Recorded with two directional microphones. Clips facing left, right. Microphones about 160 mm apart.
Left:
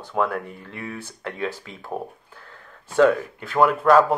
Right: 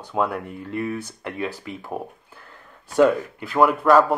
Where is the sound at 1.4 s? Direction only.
10° right (ahead or behind).